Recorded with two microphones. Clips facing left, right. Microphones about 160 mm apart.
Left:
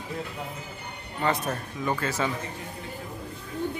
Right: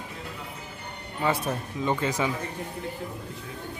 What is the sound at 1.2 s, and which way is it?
A man's voice, 10° right (ahead or behind).